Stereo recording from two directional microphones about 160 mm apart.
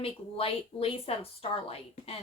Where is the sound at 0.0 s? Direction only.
35° left (ahead or behind).